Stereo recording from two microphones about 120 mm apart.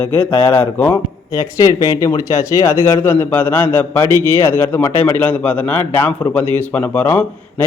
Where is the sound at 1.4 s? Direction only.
30° left (ahead or behind).